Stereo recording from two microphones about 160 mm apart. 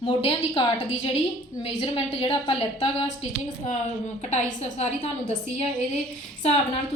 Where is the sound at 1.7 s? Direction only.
40° left (ahead or behind).